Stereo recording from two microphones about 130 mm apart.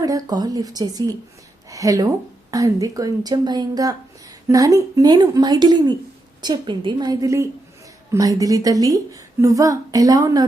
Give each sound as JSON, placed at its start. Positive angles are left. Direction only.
{"t": 0.0, "sound": "a woman's voice", "side_deg": -30}